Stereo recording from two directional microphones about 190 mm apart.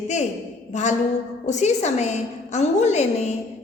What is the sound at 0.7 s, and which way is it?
A woman's voice, 35° left (ahead or behind).